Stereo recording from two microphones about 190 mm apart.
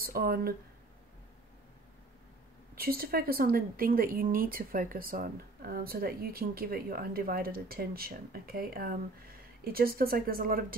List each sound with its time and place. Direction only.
0.0 s speech: 50° right (ahead or behind)
2.7 s speech: 55° right (ahead or behind)